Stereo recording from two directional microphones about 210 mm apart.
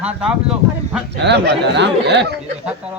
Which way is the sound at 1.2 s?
55° right (ahead or behind).